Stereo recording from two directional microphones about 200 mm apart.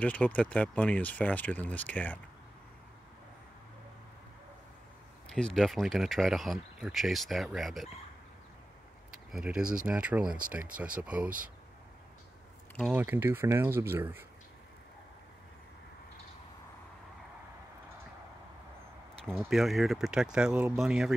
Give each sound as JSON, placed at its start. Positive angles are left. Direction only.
{"t": 0.0, "sound": "speech", "side_deg": 5}
{"t": 5.3, "sound": "speech", "side_deg": 0}
{"t": 9.3, "sound": "speech", "side_deg": -5}
{"t": 11.2, "sound": "speech", "side_deg": -45}
{"t": 12.9, "sound": "speech", "side_deg": -10}
{"t": 19.2, "sound": "speech", "side_deg": 0}